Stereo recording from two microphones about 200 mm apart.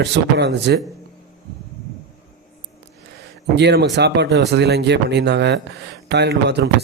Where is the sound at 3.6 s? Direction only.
60° right (ahead or behind).